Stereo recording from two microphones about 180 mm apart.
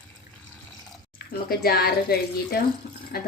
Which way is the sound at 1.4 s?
55° left (ahead or behind).